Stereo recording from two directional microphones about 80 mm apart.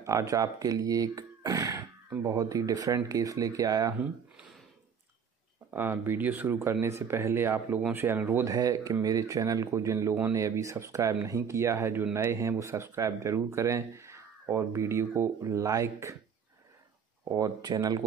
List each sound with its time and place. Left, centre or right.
0.0 s speech: right
5.7 s speech: right
8.5 s speech: right
17.2 s speech: right